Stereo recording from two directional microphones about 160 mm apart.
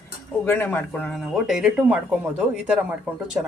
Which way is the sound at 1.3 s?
Centre (ahead or behind).